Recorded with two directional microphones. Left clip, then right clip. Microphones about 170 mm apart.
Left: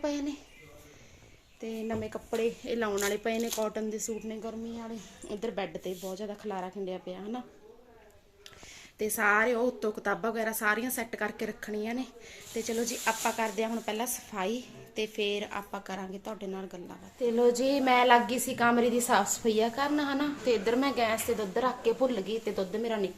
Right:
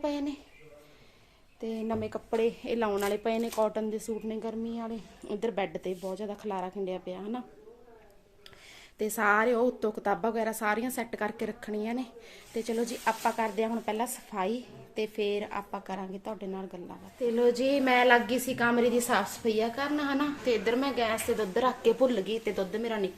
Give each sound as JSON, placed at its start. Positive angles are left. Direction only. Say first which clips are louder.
{"t": 0.0, "sound": "speech", "louder": "right 1 dB", "side_deg": 0}
{"t": 1.6, "sound": "speech", "louder": "right 2 dB", "side_deg": -10}
{"t": 4.3, "sound": "a woman's voice", "louder": "right 3 dB", "side_deg": -20}
{"t": 9.0, "sound": "a woman's voice", "louder": "even", "side_deg": -15}
{"t": 21.5, "sound": "a woman's voice", "louder": "right 3 dB", "side_deg": -15}